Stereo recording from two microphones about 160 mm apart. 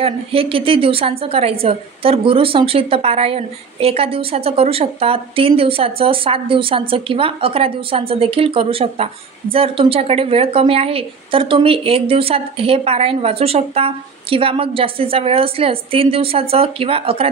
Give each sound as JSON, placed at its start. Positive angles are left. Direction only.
{"t": 0.0, "sound": "a woman's voice", "side_deg": -35}